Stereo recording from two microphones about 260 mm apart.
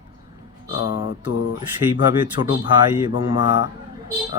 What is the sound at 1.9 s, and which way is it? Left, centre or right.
Speech, centre.